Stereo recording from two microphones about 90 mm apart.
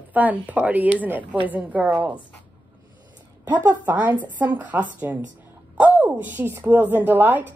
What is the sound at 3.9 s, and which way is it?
A woman's voice, 20° right (ahead or behind).